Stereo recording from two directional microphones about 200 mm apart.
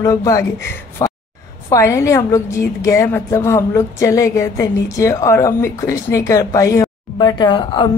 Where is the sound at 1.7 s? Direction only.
15° left (ahead or behind).